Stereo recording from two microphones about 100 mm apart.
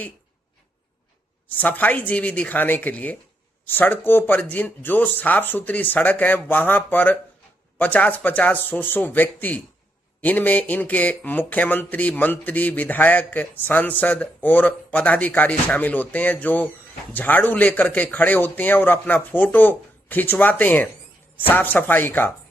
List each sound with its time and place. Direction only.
1.5 s speech: 15° left (ahead or behind)